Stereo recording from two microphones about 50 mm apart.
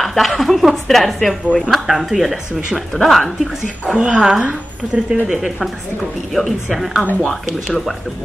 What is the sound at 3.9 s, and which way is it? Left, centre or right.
Speech, centre.